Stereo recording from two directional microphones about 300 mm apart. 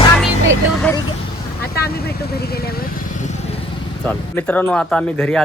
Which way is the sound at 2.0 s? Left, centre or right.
Left.